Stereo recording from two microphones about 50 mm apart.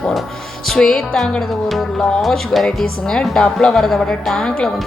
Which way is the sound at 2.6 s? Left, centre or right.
Centre.